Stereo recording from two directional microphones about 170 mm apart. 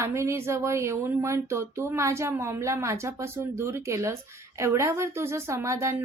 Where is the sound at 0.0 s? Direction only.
15° right (ahead or behind).